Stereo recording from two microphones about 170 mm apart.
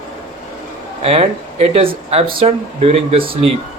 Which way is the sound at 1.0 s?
35° right (ahead or behind).